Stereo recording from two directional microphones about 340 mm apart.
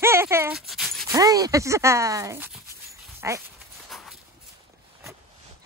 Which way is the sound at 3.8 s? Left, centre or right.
Centre.